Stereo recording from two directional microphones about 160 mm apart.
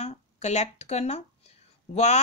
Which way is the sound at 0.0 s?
45° left (ahead or behind).